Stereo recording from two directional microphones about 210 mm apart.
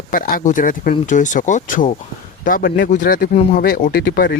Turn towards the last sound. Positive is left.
turn(degrees=45)  # may be behind; listen again after turning